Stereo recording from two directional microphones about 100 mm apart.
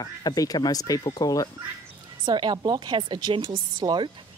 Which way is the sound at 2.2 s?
50° right (ahead or behind).